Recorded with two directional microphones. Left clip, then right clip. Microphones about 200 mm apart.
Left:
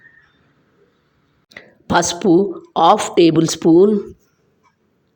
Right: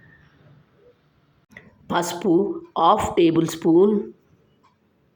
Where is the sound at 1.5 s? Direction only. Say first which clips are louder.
Left 8 dB; 20° left (ahead or behind); by 4.0 s centre (ahead or behind).